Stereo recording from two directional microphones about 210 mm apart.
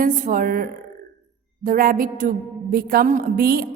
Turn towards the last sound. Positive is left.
turn(degrees=-45)  # may be behind; listen again after turning